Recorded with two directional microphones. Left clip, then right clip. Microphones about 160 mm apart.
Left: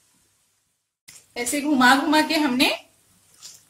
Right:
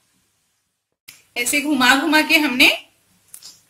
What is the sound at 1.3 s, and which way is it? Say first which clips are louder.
A woman's voice: right 4 dB; 35° left (ahead or behind).